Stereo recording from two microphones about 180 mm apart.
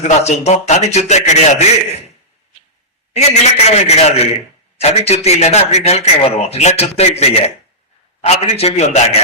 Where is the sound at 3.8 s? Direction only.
35° left (ahead or behind).